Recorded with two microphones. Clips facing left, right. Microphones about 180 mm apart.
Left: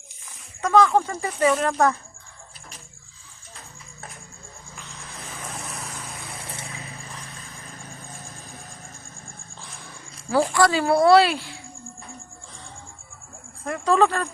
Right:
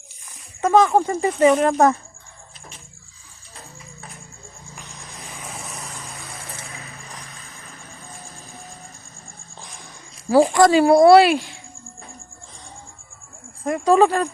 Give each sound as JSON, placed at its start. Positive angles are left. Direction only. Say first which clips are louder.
{"t": 0.7, "sound": "speech", "louder": "right 2 dB", "side_deg": -15}
{"t": 4.8, "sound": "vehicle", "louder": "even", "side_deg": -15}
{"t": 10.3, "sound": "speech", "louder": "right 6 dB", "side_deg": -15}
{"t": 13.7, "sound": "speech", "louder": "right 4 dB", "side_deg": -15}